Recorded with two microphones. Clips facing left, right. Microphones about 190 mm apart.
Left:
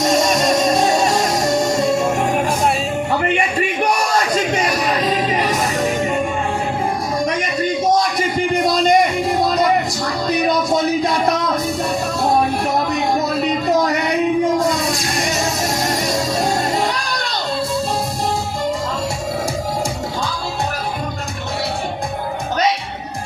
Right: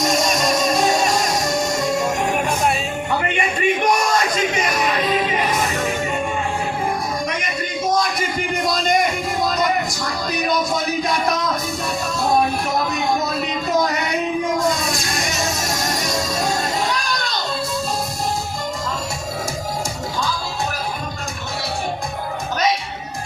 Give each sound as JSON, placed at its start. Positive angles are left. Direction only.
{"t": 0.0, "sound": "music", "side_deg": 35}
{"t": 8.6, "sound": "music", "side_deg": 35}
{"t": 12.3, "sound": "music", "side_deg": 35}
{"t": 15.2, "sound": "music", "side_deg": 35}